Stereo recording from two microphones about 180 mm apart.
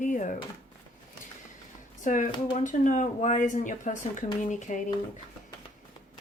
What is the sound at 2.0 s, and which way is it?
Speech, 45° left (ahead or behind).